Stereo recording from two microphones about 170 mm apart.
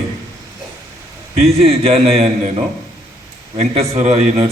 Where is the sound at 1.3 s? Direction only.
35° right (ahead or behind).